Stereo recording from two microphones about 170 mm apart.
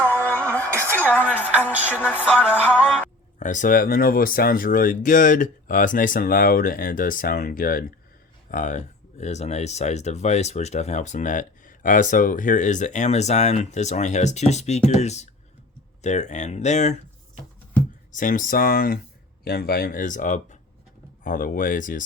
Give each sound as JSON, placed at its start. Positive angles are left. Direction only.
{"t": 0.0, "sound": "music", "side_deg": 10}
{"t": 0.7, "sound": "a sound", "side_deg": -15}
{"t": 1.9, "sound": "music", "side_deg": 10}
{"t": 3.3, "sound": "speech", "side_deg": 45}
{"t": 18.1, "sound": "speech", "side_deg": 50}